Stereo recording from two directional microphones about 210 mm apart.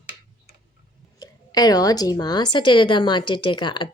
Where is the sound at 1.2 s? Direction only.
20° left (ahead or behind).